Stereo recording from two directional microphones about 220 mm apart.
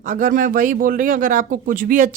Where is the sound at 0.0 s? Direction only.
35° right (ahead or behind).